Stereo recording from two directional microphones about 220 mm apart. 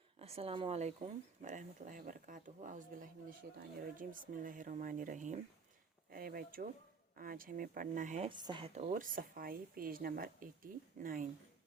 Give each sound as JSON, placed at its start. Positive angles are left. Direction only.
{"t": 0.2, "sound": "speech", "side_deg": -25}